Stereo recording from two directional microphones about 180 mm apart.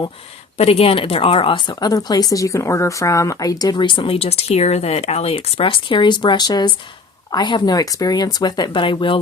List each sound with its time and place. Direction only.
0.5 s speech: 35° left (ahead or behind)